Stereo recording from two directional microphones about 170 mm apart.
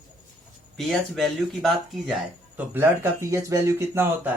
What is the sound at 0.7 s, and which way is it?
Speech, centre (ahead or behind).